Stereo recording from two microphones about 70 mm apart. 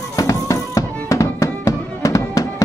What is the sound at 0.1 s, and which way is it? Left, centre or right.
Music, left.